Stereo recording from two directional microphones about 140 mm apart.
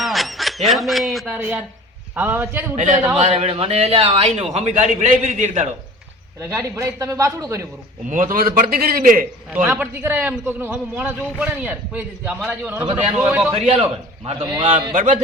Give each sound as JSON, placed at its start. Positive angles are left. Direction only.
{"t": 0.0, "sound": "squawk", "side_deg": 0}
{"t": 1.4, "sound": "a man's voice", "side_deg": -10}
{"t": 2.7, "sound": "a man's voice", "side_deg": -60}
{"t": 6.4, "sound": "a man's voice", "side_deg": -20}
{"t": 8.1, "sound": "a man's voice", "side_deg": -70}
{"t": 9.6, "sound": "a man's voice", "side_deg": -10}
{"t": 12.8, "sound": "a man's voice", "side_deg": -40}
{"t": 13.2, "sound": "a man's voice", "side_deg": -10}
{"t": 13.5, "sound": "a man's voice", "side_deg": -50}
{"t": 14.6, "sound": "a man's voice", "side_deg": -35}
{"t": 14.9, "sound": "a man's voice", "side_deg": -65}